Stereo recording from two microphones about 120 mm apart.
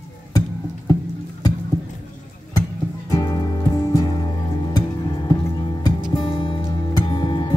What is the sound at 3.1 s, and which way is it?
Music, 35° left (ahead or behind).